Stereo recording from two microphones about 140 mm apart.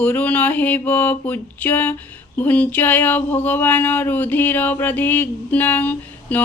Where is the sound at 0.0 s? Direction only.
10° left (ahead or behind).